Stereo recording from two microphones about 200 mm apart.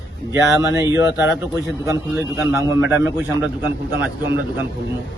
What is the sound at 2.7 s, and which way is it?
Speech, 10° right (ahead or behind).